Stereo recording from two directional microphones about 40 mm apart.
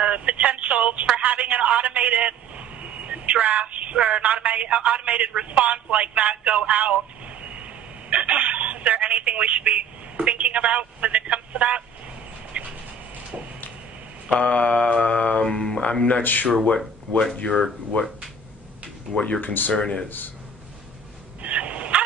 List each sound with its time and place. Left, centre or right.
0.0 s telephone: right
1.1 s a man's voice: right
12.6 s duck: right
14.4 s mantra: left
16.2 s speech: left
16.6 s speech: left
19.1 s speech: centre
19.4 s speech: left
19.7 s speech: left
21.4 s fowl: right